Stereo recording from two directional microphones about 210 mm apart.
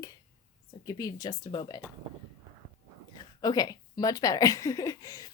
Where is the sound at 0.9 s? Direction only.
15° left (ahead or behind).